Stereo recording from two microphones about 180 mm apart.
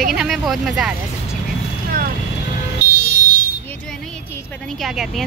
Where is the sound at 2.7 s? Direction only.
60° left (ahead or behind).